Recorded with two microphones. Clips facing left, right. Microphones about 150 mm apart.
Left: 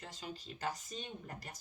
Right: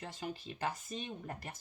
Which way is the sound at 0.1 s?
55° right (ahead or behind).